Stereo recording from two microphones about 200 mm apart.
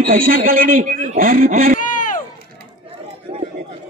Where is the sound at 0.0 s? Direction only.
45° right (ahead or behind).